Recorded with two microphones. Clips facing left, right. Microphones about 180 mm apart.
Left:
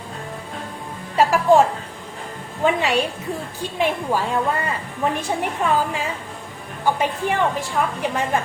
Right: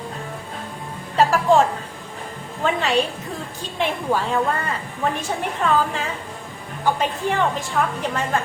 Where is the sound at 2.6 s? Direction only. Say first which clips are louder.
Left 1 dB; 10° left (ahead or behind).